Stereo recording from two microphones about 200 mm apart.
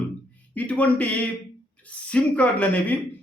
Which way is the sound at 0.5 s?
5° left (ahead or behind).